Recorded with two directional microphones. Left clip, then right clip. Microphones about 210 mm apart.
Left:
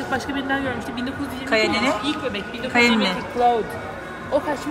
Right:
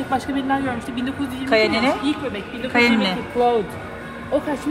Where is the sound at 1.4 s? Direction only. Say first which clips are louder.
Right 2 dB; 5° left (ahead or behind).